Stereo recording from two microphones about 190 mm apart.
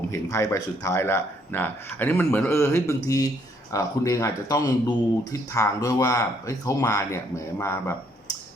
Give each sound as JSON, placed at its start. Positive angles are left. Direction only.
{"t": 0.1, "sound": "speech", "side_deg": 15}